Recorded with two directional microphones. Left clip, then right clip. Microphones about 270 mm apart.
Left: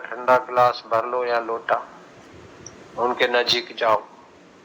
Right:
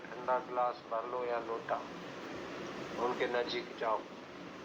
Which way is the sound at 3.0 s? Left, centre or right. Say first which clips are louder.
Left 14 dB; left.